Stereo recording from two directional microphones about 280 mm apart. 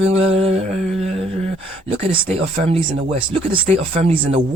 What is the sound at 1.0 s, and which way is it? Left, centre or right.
Speech, right.